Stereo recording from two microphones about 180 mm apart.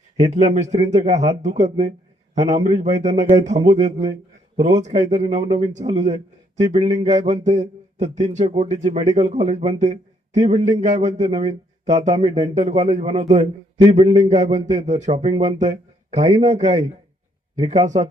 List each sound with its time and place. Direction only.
0.2 s a man's voice: 40° right (ahead or behind)